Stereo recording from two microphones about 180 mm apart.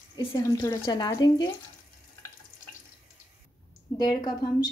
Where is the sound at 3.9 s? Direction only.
20° left (ahead or behind).